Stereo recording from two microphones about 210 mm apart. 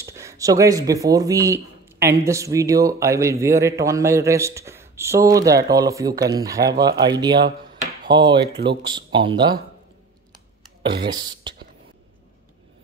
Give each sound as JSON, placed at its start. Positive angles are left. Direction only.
{"t": 0.0, "sound": "speech", "side_deg": -15}
{"t": 11.1, "sound": "speech", "side_deg": -20}